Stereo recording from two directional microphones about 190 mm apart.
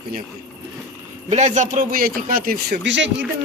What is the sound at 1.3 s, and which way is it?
A man's voice, 40° right (ahead or behind).